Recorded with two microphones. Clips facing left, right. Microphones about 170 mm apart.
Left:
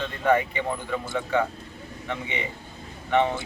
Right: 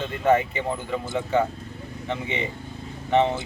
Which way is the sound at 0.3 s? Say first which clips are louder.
Right 2 dB; 25° right (ahead or behind).